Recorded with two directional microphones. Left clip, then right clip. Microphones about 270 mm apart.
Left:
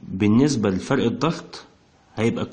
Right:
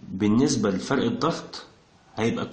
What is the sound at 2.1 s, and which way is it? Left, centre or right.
Speech, left.